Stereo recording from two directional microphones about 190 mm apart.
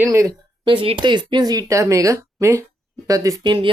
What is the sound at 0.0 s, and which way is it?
Speech, 15° right (ahead or behind).